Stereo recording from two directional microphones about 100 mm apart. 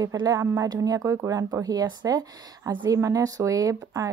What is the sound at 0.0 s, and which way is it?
Speech, 35° right (ahead or behind).